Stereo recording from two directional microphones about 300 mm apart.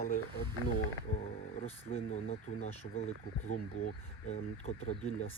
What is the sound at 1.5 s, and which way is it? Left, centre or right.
Speech, left.